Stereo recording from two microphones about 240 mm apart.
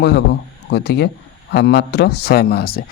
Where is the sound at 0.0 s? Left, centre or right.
Left.